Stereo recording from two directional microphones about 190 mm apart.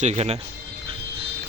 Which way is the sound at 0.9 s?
30° right (ahead or behind).